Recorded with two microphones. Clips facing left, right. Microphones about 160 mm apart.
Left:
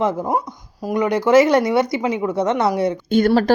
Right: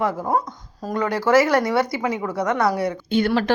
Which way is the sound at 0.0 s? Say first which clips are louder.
Left 2 dB; 20° left (ahead or behind).